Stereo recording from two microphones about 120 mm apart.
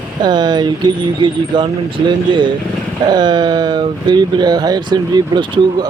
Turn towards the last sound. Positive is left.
turn(degrees=-40)  # may be behind; listen again after turning